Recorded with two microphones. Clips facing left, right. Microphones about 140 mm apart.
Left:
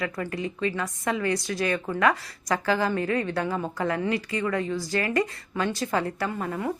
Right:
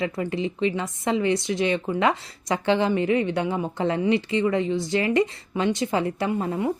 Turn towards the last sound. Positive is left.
turn(degrees=-25)  # may be behind; listen again after turning